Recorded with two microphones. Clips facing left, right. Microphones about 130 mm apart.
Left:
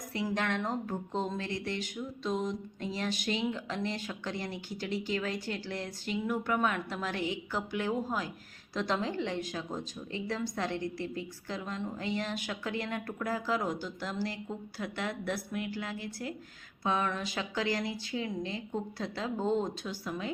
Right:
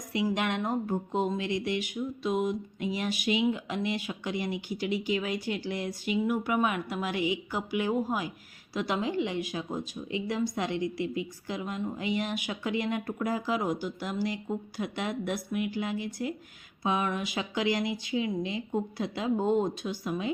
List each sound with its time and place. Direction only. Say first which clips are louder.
0.1 s speech: right 4 dB; 15° right (ahead or behind)